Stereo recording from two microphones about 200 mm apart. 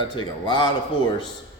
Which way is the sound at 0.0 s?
20° left (ahead or behind).